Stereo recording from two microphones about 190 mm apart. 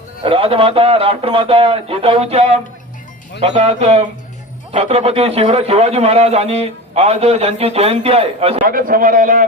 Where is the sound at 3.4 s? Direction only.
35° right (ahead or behind).